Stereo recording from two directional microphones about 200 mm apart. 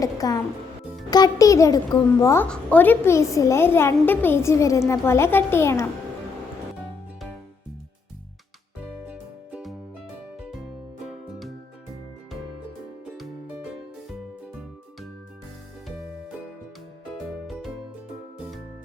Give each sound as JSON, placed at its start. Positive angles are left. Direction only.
{"t": 0.0, "sound": "a child's voice", "side_deg": 15}
{"t": 9.0, "sound": "music", "side_deg": -5}
{"t": 11.0, "sound": "music", "side_deg": 0}
{"t": 17.4, "sound": "music", "side_deg": 0}